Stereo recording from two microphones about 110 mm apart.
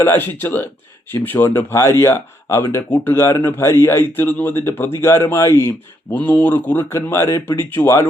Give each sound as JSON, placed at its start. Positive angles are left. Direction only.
{"t": 0.0, "sound": "speech", "side_deg": 20}